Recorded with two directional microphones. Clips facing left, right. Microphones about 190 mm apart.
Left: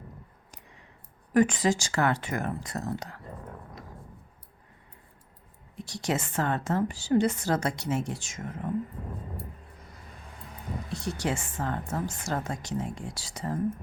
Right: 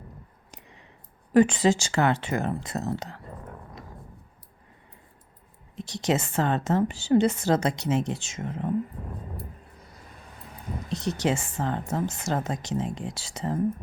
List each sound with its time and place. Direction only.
1.3 s a woman's voice: 30° right (ahead or behind)
5.7 s a woman's voice: 20° right (ahead or behind)
10.8 s a woman's voice: 20° right (ahead or behind)